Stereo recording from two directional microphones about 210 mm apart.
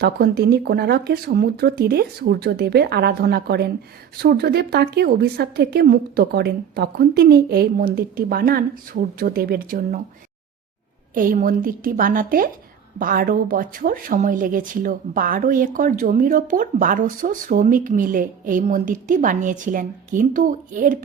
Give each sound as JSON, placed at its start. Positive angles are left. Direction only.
{"t": 0.0, "sound": "a woman's voice", "side_deg": -50}
{"t": 11.1, "sound": "speech", "side_deg": -40}